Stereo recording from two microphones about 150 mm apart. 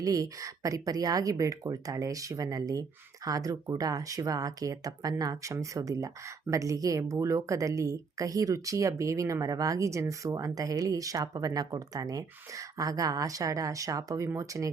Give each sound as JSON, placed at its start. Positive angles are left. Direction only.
{"t": 0.0, "sound": "speech", "side_deg": -25}